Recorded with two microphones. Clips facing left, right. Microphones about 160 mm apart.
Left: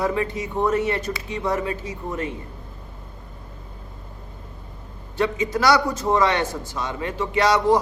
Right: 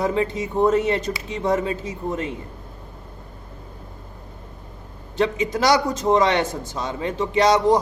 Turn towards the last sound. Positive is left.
turn(degrees=-20)  # may be behind; listen again after turning